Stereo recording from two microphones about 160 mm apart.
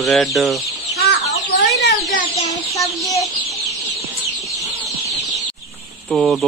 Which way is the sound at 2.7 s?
20° left (ahead or behind).